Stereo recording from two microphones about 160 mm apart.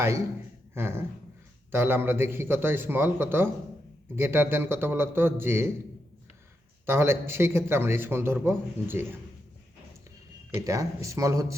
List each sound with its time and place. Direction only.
0.7 s a sound: 15° right (ahead or behind)
1.7 s a man's voice: 15° right (ahead or behind)
6.8 s a man's voice: 15° right (ahead or behind)
10.6 s speech: 20° right (ahead or behind)